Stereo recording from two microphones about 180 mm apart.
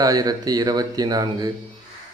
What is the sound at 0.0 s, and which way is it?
Speech, 20° right (ahead or behind).